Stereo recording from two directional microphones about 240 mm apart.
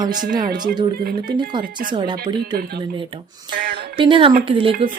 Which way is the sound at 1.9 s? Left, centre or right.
Centre.